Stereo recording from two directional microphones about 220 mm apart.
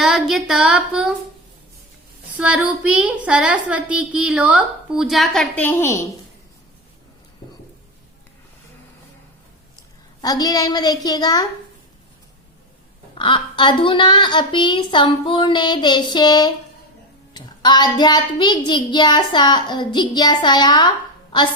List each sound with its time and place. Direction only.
0.0 s child singing: centre (ahead or behind)
2.4 s a woman's voice: 5° right (ahead or behind); by 6.0 s 10° left (ahead or behind)
10.2 s a woman's voice: 20° left (ahead or behind)
13.1 s speech: 20° left (ahead or behind)